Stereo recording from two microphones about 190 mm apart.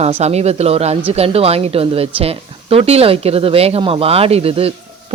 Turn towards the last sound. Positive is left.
turn(degrees=-30)  # may be behind; listen again after turning